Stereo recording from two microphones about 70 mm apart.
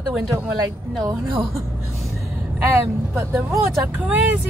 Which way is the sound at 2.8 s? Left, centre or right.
Right.